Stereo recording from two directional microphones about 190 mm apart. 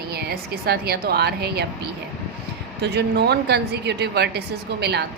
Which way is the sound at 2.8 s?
60° right (ahead or behind).